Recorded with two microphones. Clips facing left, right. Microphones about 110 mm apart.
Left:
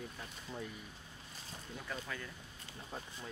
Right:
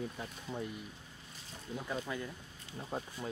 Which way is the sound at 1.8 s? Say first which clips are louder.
Right 6 dB; 20° right (ahead or behind).